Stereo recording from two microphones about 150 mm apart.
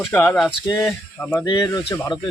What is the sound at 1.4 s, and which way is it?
Speech, 25° left (ahead or behind).